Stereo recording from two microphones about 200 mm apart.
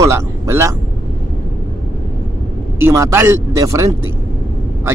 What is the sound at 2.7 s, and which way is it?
Speech, 15° right (ahead or behind).